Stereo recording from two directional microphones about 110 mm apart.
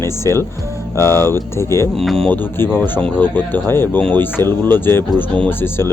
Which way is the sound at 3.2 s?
15° left (ahead or behind).